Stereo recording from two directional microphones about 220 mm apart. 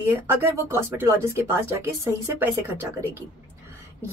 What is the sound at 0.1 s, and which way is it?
Speech, 10° right (ahead or behind).